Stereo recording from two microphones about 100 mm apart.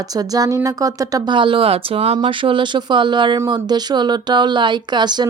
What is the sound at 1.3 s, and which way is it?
Speech, 55° right (ahead or behind).